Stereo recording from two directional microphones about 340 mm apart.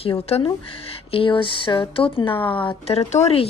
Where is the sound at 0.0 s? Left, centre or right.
Centre.